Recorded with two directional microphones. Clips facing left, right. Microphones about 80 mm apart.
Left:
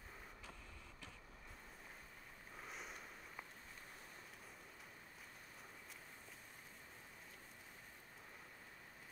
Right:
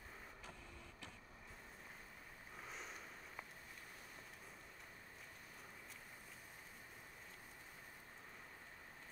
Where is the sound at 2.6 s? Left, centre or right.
Centre.